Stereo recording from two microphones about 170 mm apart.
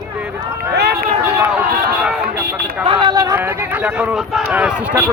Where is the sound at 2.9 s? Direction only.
30° right (ahead or behind).